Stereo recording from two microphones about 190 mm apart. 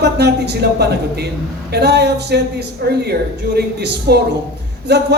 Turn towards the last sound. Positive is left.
turn(degrees=-60)  # may be behind; listen again after turning